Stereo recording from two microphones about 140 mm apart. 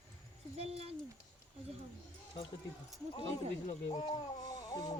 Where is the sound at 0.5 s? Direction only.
45° right (ahead or behind).